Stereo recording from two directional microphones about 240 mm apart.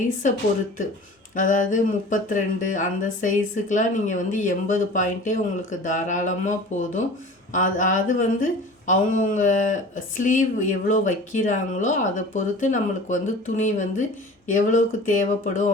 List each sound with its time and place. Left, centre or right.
1.4 s speech: left